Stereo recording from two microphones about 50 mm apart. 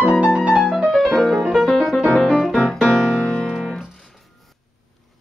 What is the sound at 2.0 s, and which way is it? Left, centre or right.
Music, centre.